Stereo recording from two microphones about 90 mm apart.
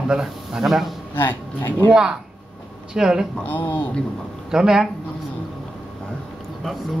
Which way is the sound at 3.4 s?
20° left (ahead or behind).